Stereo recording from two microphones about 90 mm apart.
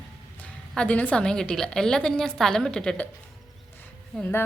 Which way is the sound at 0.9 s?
15° left (ahead or behind).